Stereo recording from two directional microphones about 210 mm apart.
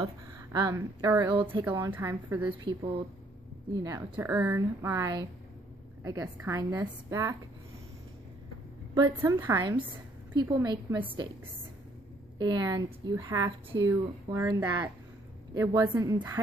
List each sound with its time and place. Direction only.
0.0 s a woman's voice: 20° right (ahead or behind)
1.6 s a woman's voice: 10° right (ahead or behind)
2.6 s a woman's voice: 25° right (ahead or behind)
9.2 s a woman's voice: 10° right (ahead or behind)
12.4 s a woman's voice: 20° right (ahead or behind)